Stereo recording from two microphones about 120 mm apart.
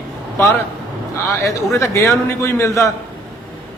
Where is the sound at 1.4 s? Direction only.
25° left (ahead or behind).